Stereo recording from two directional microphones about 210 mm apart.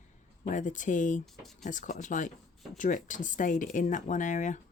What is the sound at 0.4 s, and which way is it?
Speech, 35° left (ahead or behind).